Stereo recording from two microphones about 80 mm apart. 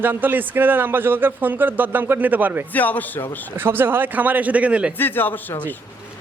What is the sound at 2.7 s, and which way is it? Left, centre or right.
Speech, left.